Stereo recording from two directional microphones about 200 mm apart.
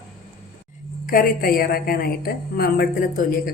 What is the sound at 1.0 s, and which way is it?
A woman's voice, 45° left (ahead or behind).